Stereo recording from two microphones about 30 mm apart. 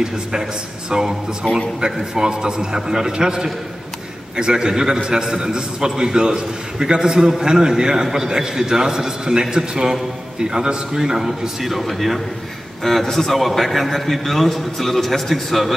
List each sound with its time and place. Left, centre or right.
0.0 s a man's voice: centre
1.5 s a man's voice: left
2.1 s a man's voice: right
11.0 s a man's voice: centre